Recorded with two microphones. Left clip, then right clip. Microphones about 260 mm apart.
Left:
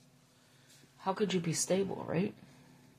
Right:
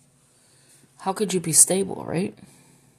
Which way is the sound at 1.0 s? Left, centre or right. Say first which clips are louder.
Right 8 dB; right.